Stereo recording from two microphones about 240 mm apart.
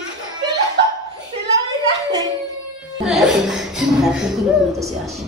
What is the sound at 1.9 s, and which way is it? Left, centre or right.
Hands, centre.